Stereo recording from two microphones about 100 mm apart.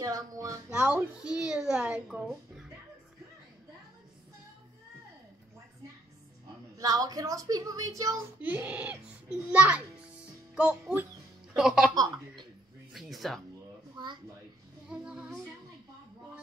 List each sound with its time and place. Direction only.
0.0 s speech: 35° right (ahead or behind)
0.7 s a woman's voice: 10° right (ahead or behind)
6.8 s a woman's voice: 40° right (ahead or behind)
8.4 s a woman's voice: 20° right (ahead or behind)
11.9 s a woman's voice: 40° right (ahead or behind)
12.9 s speech: centre (ahead or behind)
14.9 s child singing: 10° right (ahead or behind)